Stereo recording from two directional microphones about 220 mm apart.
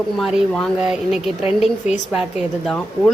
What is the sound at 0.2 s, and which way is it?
A woman's voice, centre (ahead or behind).